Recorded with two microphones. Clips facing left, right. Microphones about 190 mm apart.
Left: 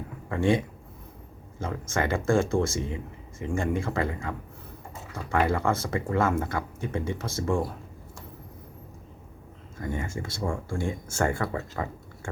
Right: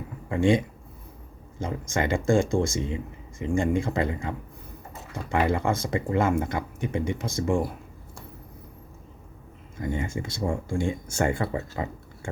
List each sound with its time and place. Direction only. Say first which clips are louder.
0.3 s speech: right 2 dB; 15° right (ahead or behind)
9.9 s speech: right 2 dB; 20° right (ahead or behind)